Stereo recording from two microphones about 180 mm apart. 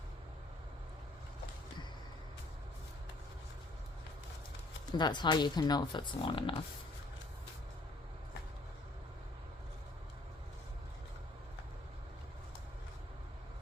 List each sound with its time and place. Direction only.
4.9 s speech: 25° left (ahead or behind)